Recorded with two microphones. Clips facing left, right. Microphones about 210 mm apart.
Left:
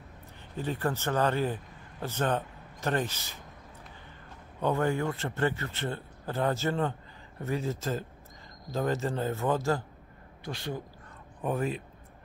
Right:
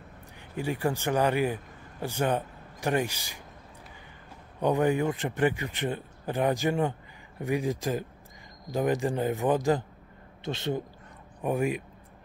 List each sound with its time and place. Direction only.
0.6 s a man's voice: 10° right (ahead or behind)
4.6 s speech: 15° right (ahead or behind)